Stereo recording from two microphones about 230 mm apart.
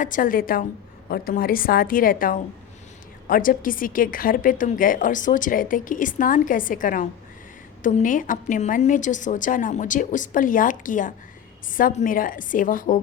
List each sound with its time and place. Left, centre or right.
0.0 s a woman's voice: left